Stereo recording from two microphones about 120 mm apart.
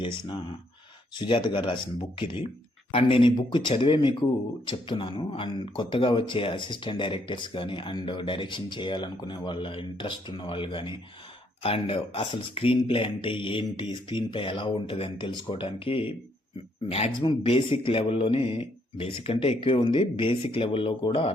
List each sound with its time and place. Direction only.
1.1 s speech: 40° left (ahead or behind)
17.2 s speech: 45° left (ahead or behind)